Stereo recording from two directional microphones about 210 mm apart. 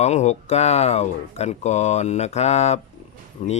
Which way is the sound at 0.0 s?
30° left (ahead or behind).